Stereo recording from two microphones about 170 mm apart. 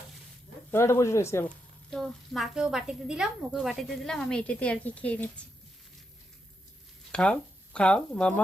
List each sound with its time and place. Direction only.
0.7 s speech: 15° left (ahead or behind)
1.9 s a woman's voice: centre (ahead or behind)
7.1 s speech: 5° left (ahead or behind)